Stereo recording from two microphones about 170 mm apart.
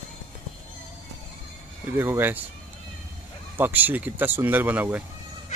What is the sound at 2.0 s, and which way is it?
Speech, 10° right (ahead or behind).